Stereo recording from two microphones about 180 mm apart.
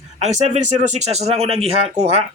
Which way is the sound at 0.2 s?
40° right (ahead or behind).